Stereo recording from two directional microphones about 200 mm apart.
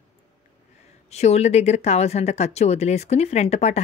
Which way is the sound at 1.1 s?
35° left (ahead or behind).